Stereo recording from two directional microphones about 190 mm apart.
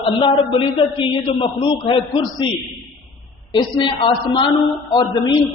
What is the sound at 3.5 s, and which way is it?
A man's voice, 25° left (ahead or behind).